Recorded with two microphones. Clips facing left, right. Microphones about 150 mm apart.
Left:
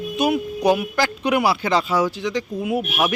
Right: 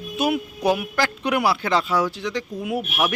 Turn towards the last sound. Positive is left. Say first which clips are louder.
# left 2 dB
turn(degrees=5)  # may be behind; listen again after turning